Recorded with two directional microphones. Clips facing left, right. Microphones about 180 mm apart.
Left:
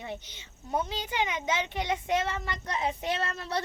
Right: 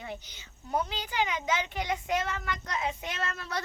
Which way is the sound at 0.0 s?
25° left (ahead or behind).